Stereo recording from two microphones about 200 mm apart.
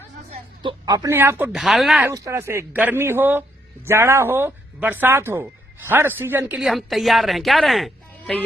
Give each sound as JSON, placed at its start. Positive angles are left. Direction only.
{"t": 0.6, "sound": "speech", "side_deg": -20}
{"t": 2.0, "sound": "speech", "side_deg": -15}